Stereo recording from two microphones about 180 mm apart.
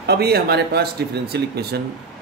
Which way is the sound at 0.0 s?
60° right (ahead or behind).